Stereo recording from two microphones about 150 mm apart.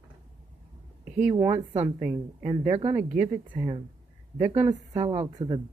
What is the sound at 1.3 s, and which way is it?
A woman's voice, 20° right (ahead or behind).